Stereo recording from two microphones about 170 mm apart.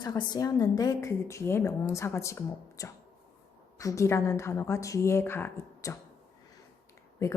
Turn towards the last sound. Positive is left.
turn(degrees=15)  # may be behind; listen again after turning